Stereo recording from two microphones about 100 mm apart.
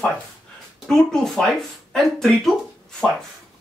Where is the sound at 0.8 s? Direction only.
5° left (ahead or behind).